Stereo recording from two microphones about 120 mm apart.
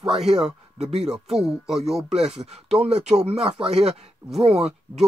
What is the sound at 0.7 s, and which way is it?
Speech, 55° right (ahead or behind).